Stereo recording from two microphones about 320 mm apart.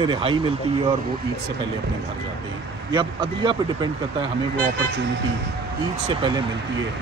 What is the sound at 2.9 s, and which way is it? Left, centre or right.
Speech, centre.